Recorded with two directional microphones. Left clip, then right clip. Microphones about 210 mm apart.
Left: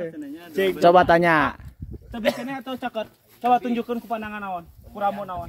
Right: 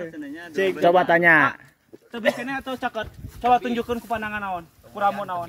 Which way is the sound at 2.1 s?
45° left (ahead or behind).